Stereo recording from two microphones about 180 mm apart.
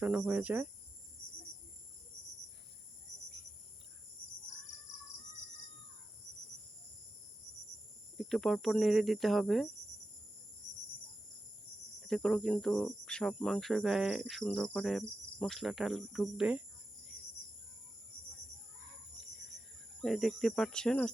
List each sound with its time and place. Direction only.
0.0 s cricket: 5° right (ahead or behind)
8.2 s cricket: centre (ahead or behind)
12.0 s cricket: centre (ahead or behind)
20.0 s cricket: centre (ahead or behind)